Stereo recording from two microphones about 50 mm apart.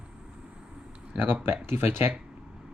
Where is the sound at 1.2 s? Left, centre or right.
Right.